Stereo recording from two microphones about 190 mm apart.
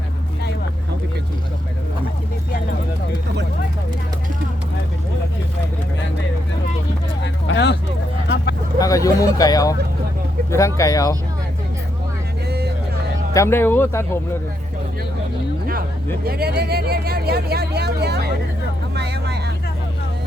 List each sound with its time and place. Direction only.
7.4 s a sound: 65° left (ahead or behind)
8.8 s speech: 20° left (ahead or behind)
13.3 s speech: 15° left (ahead or behind)
16.2 s speech: 55° right (ahead or behind)
18.9 s vehicle: 60° right (ahead or behind)